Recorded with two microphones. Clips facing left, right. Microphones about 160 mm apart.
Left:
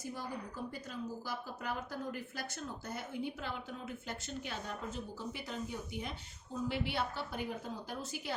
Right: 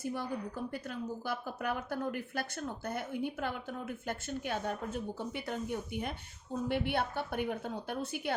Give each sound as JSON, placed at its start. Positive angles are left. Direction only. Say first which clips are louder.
{"t": 0.0, "sound": "speech", "louder": "right 6 dB", "side_deg": -60}